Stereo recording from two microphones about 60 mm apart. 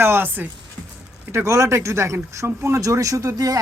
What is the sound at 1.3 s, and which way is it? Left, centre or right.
Speech, right.